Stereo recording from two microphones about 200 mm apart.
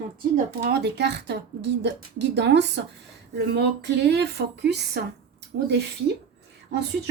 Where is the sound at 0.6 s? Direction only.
55° right (ahead or behind).